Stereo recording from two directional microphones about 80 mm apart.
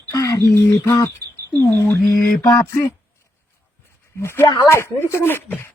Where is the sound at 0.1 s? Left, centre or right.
Left.